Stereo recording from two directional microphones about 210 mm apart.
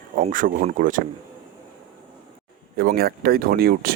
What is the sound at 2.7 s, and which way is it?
Speech, 45° right (ahead or behind).